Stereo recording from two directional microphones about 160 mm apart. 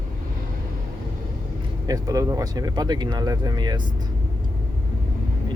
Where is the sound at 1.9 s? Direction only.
20° right (ahead or behind).